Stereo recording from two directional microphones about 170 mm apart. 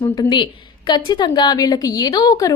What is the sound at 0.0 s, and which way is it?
A woman's voice, 25° left (ahead or behind).